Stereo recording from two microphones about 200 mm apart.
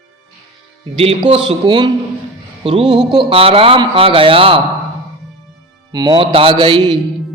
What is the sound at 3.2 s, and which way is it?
A man's voice, 25° right (ahead or behind).